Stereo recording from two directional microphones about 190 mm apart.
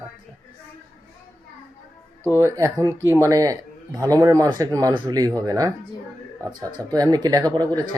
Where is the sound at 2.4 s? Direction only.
15° right (ahead or behind).